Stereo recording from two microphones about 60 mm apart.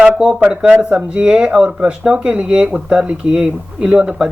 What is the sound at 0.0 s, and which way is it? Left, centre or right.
Speech, centre.